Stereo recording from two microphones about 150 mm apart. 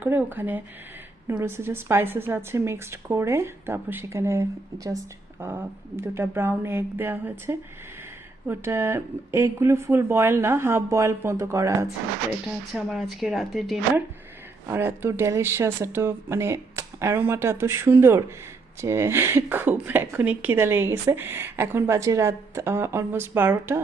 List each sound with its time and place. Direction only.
0.0 s speech: 15° right (ahead or behind)
12.7 s speech: centre (ahead or behind)
14.7 s speech: 15° right (ahead or behind)